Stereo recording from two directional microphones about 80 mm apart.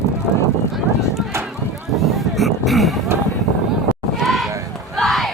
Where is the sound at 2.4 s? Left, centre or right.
Centre.